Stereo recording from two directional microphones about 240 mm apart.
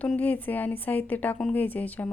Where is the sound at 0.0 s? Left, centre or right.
Centre.